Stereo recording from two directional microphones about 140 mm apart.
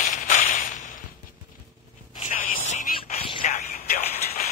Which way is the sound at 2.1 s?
65° left (ahead or behind).